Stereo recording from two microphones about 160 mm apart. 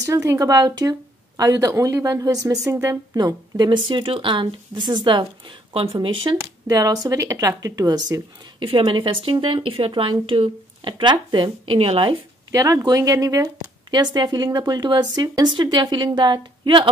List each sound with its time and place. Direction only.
0.0 s speech: 20° right (ahead or behind)
8.6 s speech: 35° right (ahead or behind)